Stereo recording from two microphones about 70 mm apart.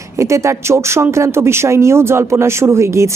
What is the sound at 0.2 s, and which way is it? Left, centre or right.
Speech, right.